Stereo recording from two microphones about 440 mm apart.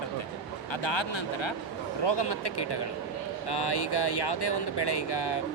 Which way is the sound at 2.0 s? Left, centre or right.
Left.